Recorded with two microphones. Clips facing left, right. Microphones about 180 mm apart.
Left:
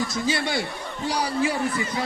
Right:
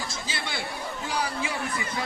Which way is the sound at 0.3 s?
50° left (ahead or behind).